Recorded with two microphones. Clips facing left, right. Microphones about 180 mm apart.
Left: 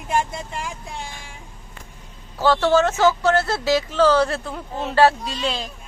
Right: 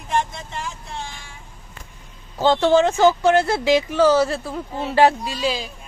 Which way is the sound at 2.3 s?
20° right (ahead or behind).